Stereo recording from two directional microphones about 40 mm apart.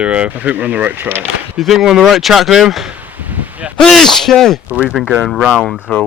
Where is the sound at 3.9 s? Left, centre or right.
Centre.